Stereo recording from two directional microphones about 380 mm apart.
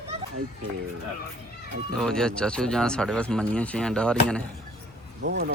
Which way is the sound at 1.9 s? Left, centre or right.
Centre.